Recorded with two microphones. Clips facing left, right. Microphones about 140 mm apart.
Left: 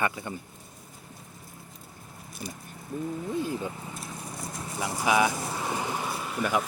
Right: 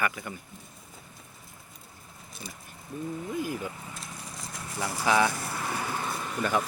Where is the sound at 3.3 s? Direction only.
25° left (ahead or behind).